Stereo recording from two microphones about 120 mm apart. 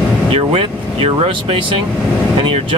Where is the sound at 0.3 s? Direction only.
50° right (ahead or behind).